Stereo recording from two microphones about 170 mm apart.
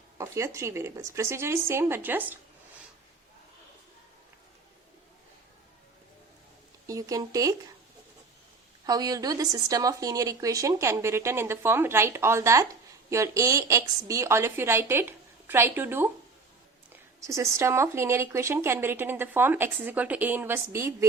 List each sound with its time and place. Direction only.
0.2 s speech: 15° right (ahead or behind)
6.8 s speech: 20° right (ahead or behind)
8.9 s speech: 20° right (ahead or behind)
17.2 s speech: 15° right (ahead or behind)